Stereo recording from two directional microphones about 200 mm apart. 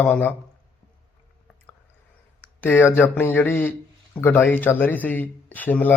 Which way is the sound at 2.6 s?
10° left (ahead or behind).